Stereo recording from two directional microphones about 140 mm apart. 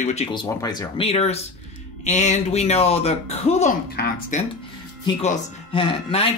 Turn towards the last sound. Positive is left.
turn(degrees=40)  # may be behind; listen again after turning